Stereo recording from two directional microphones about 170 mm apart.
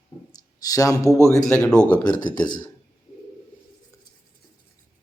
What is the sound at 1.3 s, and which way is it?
Speech, 20° left (ahead or behind).